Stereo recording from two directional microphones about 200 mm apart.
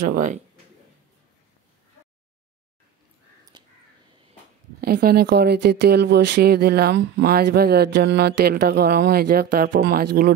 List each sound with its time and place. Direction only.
0.0 s speech: 45° right (ahead or behind)
3.5 s crow: 20° right (ahead or behind)
4.7 s speech: 50° right (ahead or behind)